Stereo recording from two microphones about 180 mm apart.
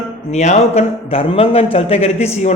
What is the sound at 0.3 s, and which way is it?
A man's voice, 40° left (ahead or behind).